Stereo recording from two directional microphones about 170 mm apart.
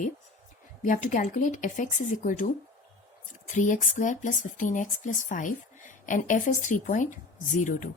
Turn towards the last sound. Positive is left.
turn(degrees=50)  # may be behind; listen again after turning